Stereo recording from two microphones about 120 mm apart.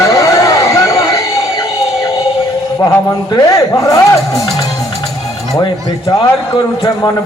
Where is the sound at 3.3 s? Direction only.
25° left (ahead or behind).